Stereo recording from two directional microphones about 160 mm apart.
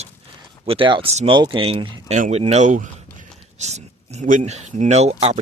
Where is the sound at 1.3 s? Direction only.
30° right (ahead or behind).